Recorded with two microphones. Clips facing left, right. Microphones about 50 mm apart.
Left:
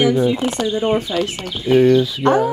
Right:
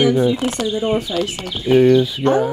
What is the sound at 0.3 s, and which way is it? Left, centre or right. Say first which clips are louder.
Speech: even; left.